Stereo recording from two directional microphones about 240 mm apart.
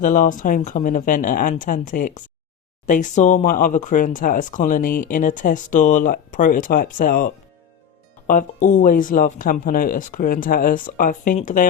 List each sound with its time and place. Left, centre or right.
0.0 s speech: left